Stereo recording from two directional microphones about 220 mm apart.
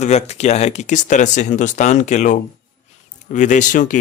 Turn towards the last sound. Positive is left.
turn(degrees=35)  # may be behind; listen again after turning